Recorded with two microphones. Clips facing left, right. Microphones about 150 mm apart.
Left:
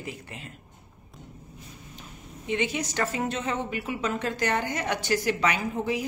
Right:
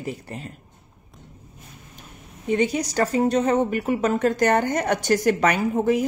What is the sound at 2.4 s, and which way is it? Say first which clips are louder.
A woman's voice: right 6 dB; 40° right (ahead or behind).